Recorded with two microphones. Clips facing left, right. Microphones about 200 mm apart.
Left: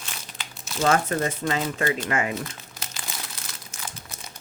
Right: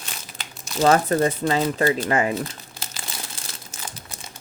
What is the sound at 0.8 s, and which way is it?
Speech, 35° right (ahead or behind).